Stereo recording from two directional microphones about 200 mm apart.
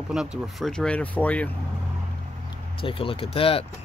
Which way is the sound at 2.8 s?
25° left (ahead or behind).